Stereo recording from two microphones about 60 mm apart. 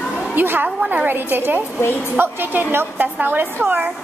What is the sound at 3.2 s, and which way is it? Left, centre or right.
Speech, right.